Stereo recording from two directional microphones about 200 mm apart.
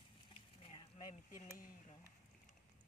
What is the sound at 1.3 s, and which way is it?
Speech, 45° left (ahead or behind).